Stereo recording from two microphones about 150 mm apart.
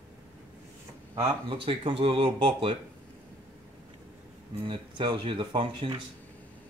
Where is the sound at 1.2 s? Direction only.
40° right (ahead or behind).